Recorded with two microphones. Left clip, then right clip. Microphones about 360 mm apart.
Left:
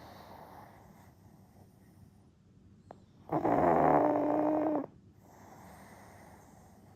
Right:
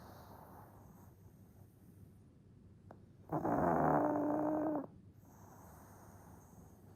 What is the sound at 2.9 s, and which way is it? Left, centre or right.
Dog, left.